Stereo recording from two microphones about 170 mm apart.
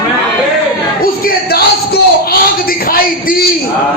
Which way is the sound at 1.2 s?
65° left (ahead or behind).